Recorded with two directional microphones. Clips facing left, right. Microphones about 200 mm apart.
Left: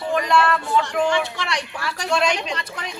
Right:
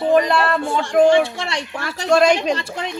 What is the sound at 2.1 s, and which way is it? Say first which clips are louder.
Speech: right 8 dB; 45° right (ahead or behind).